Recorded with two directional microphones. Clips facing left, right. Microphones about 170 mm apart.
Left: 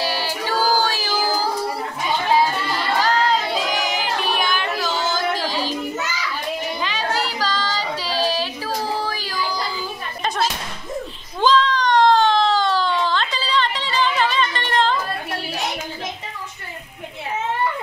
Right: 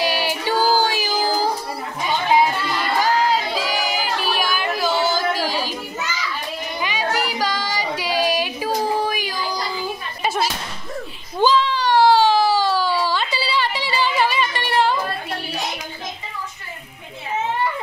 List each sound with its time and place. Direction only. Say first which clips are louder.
0.0 s music: right 2 dB; 15° right (ahead or behind)
3.0 s child singing: right 1 dB; 10° right (ahead or behind)
6.8 s child singing: right 5 dB; 10° right (ahead or behind)
10.2 s a sound: right 1 dB; 5° right (ahead or behind)